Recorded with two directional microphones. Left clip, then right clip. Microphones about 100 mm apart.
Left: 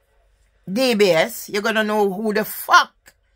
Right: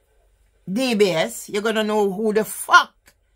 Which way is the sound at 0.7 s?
25° left (ahead or behind).